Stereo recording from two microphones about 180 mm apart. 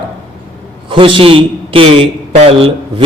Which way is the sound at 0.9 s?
30° right (ahead or behind).